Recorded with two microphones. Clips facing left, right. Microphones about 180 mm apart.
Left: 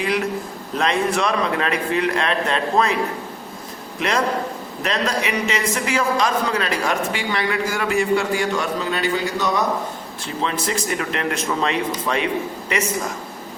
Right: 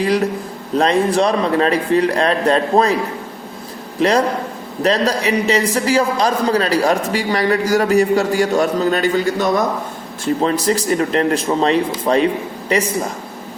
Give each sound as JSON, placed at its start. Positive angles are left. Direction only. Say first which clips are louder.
{"t": 0.8, "sound": "a man's voice", "louder": "right 6 dB", "side_deg": -35}
{"t": 4.0, "sound": "a man's voice", "louder": "right 6 dB", "side_deg": -35}